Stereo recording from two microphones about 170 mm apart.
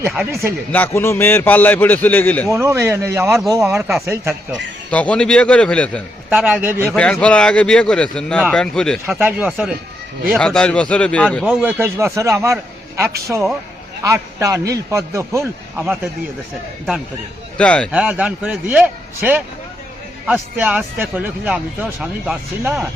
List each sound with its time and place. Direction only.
0.7 s a man's voice: 10° left (ahead or behind)
2.5 s speech: 15° right (ahead or behind)
4.9 s speech: 5° left (ahead or behind)
6.3 s speech: 10° right (ahead or behind)
6.9 s speech: 5° left (ahead or behind)
9.0 s speech: 10° right (ahead or behind); by 11.4 s 5° left (ahead or behind)
11.4 s speech: 10° right (ahead or behind)
17.6 s a man's voice: 5° left (ahead or behind)
17.9 s speech: 5° right (ahead or behind)